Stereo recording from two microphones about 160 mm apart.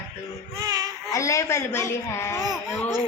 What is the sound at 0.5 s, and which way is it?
Speech, 20° right (ahead or behind).